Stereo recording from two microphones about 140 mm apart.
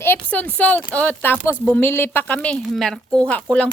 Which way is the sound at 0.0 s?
15° left (ahead or behind).